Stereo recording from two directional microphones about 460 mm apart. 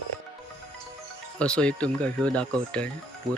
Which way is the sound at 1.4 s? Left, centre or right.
Centre.